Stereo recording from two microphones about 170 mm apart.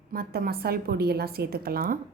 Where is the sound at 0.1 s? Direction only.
60° right (ahead or behind).